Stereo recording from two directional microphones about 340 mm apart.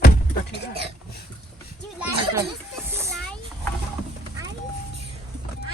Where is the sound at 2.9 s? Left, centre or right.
Centre.